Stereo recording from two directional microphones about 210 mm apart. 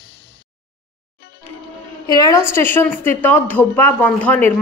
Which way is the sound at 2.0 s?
15° left (ahead or behind).